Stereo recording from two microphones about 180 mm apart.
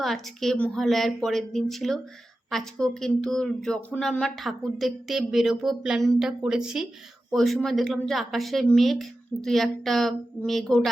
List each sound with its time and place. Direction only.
0.0 s speech: centre (ahead or behind)